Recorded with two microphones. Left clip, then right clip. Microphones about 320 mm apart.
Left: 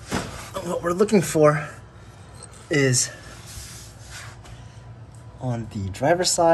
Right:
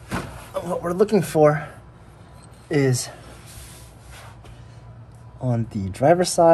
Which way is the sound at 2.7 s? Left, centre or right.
Centre.